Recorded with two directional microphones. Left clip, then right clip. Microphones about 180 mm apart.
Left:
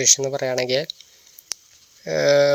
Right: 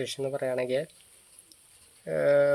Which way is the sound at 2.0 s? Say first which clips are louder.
Left 6 dB; 25° left (ahead or behind).